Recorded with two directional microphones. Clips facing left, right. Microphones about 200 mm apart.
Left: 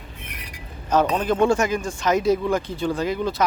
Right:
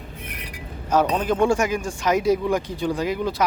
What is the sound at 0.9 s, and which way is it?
Speech, 10° right (ahead or behind).